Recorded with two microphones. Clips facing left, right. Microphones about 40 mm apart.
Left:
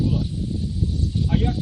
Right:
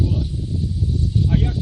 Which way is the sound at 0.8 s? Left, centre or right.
Left.